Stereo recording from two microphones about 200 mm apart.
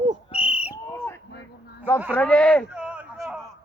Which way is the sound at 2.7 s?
5° right (ahead or behind).